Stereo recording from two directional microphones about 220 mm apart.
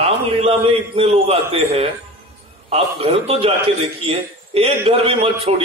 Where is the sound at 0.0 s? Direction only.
25° right (ahead or behind).